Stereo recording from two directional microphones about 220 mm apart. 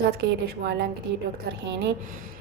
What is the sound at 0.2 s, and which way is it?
Speech, 50° right (ahead or behind).